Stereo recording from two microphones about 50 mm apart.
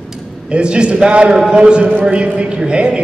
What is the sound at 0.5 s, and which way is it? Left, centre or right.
A man's voice, centre.